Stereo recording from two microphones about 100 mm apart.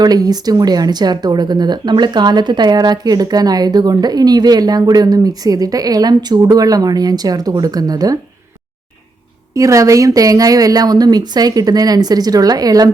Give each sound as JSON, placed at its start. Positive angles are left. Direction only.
{"t": 0.0, "sound": "speech", "side_deg": -40}
{"t": 9.6, "sound": "speech", "side_deg": -30}